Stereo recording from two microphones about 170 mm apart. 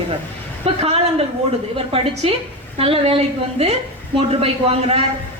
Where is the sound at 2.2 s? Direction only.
35° right (ahead or behind).